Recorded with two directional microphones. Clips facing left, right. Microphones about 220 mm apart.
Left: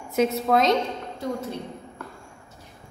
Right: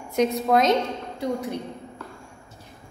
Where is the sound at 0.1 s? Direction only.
5° left (ahead or behind).